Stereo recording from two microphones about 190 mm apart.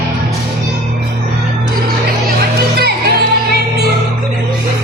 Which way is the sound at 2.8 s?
55° right (ahead or behind).